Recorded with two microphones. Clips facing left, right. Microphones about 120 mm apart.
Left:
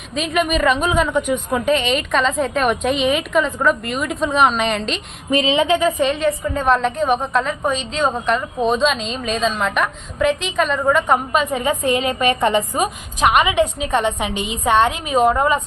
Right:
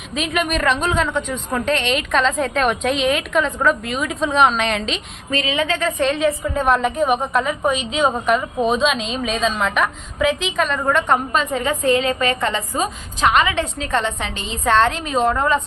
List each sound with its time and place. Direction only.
0.1 s a woman's voice: centre (ahead or behind)
5.3 s a woman's voice: 20° left (ahead or behind)
6.0 s a woman's voice: centre (ahead or behind)
11.4 s a woman's voice: 15° left (ahead or behind)